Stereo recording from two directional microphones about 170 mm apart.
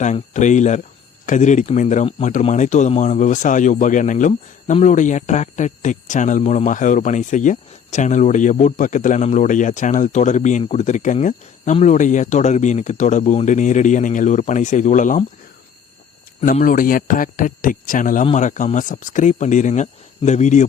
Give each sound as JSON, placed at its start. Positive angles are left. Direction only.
{"t": 0.0, "sound": "a man's voice", "side_deg": 45}
{"t": 16.5, "sound": "a man's voice", "side_deg": 55}